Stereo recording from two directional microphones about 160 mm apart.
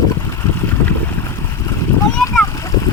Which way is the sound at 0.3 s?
15° left (ahead or behind).